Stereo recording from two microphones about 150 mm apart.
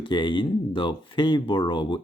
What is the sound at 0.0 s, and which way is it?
Speech, 30° left (ahead or behind).